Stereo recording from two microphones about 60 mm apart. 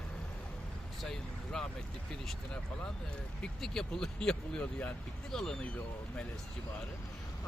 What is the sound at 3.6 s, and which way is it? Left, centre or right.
Speech, centre.